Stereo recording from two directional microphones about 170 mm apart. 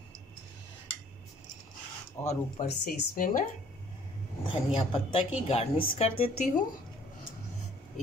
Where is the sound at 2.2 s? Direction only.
40° left (ahead or behind).